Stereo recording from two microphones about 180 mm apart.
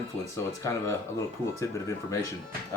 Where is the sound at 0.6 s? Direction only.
15° left (ahead or behind).